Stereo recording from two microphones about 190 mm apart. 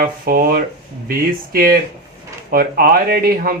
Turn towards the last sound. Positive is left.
turn(degrees=-50)  # may be behind; listen again after turning